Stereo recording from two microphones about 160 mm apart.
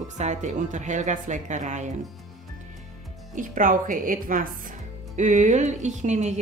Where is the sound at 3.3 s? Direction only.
55° right (ahead or behind).